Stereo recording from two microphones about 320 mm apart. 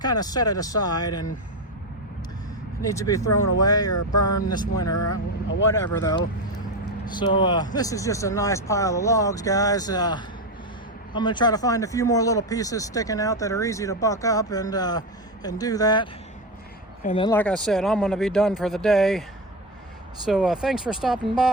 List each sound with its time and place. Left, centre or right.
0.0 s speech: centre
2.8 s speech: centre
4.9 s speech: left
5.7 s speech: centre
20.2 s speech: centre